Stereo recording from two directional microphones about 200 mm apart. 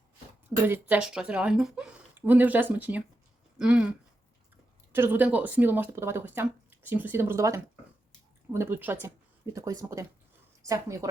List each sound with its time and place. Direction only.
0.5 s speech: 10° right (ahead or behind)